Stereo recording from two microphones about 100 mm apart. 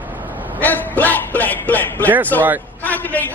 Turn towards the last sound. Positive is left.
turn(degrees=15)  # may be behind; listen again after turning